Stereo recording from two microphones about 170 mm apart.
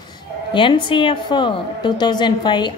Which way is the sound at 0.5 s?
30° left (ahead or behind).